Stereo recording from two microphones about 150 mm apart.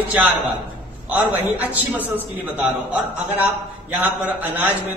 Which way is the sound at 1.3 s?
10° right (ahead or behind).